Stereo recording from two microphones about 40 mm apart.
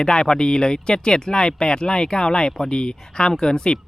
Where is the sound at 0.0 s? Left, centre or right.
Left.